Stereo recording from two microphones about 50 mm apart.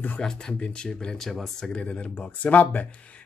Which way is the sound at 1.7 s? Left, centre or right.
Left.